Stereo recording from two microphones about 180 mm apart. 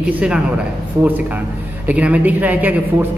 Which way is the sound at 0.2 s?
5° right (ahead or behind).